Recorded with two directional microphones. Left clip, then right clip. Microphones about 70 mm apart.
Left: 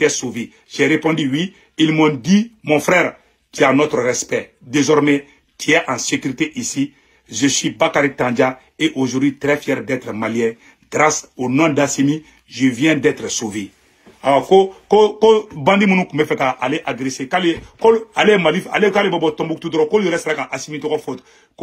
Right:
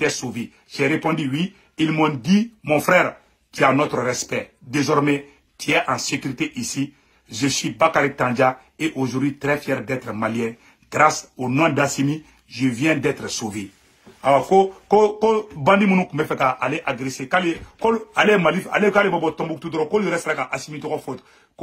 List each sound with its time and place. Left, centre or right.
0.0 s speech: right